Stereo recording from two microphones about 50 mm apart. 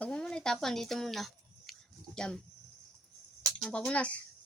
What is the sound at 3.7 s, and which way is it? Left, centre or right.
Speech, centre.